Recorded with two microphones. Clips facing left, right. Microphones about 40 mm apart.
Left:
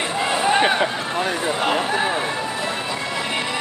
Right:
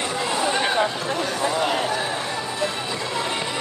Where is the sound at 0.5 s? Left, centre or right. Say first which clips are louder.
Left 8 dB; left.